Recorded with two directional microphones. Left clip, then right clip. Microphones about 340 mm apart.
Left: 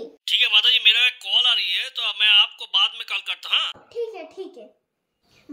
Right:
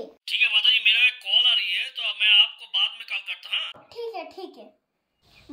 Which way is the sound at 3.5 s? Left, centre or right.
Centre.